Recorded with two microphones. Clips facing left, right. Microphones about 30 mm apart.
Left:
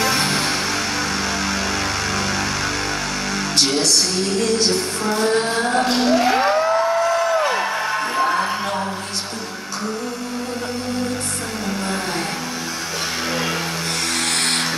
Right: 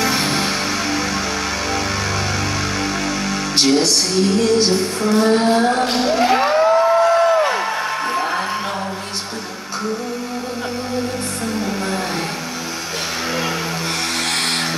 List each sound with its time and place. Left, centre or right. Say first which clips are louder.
0.0 s music: right 1 dB; centre
5.1 s music: right 4 dB; centre
7.0 s a sound: right 5 dB; right
7.3 s music: right 2 dB; centre